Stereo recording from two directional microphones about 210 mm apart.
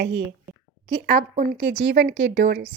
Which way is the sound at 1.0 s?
35° right (ahead or behind).